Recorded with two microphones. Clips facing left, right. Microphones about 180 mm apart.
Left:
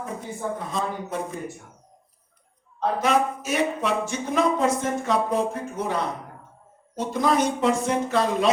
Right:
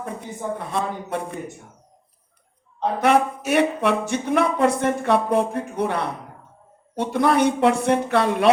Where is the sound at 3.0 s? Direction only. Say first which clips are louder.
Right 5 dB; 65° right (ahead or behind).